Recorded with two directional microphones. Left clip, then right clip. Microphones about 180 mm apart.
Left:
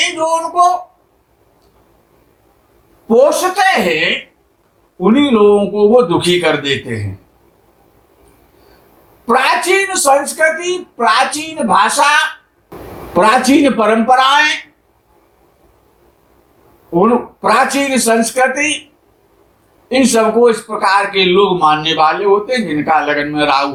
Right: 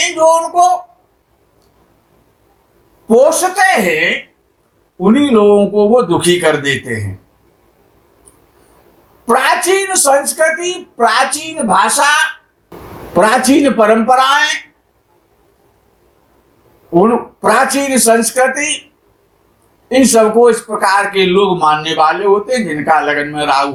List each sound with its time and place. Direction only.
0.0 s speech: 40° right (ahead or behind)
3.1 s a man's voice: 40° right (ahead or behind)
9.2 s a man's voice: 40° right (ahead or behind)
16.9 s a man's voice: 40° right (ahead or behind)
19.9 s a man's voice: 40° right (ahead or behind)